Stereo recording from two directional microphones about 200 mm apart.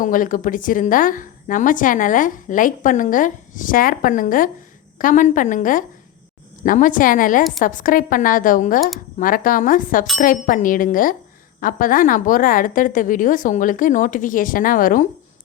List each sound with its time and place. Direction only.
0.0 s a woman's voice: 40° left (ahead or behind)